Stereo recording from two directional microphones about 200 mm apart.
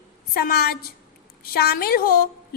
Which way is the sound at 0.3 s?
50° left (ahead or behind).